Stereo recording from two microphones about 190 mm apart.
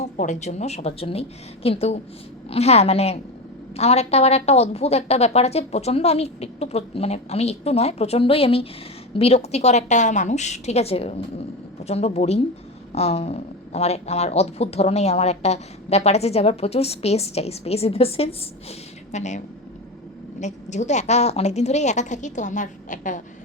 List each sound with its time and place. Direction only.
0.0 s speech: 40° left (ahead or behind)
20.4 s speech: 40° left (ahead or behind)